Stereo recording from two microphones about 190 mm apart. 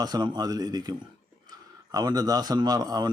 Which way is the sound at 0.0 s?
20° right (ahead or behind).